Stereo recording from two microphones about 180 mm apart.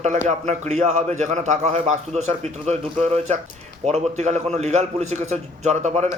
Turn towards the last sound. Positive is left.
turn(degrees=-40)  # may be behind; listen again after turning